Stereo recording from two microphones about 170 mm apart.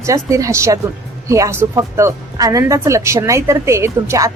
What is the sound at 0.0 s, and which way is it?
Speech, 20° right (ahead or behind).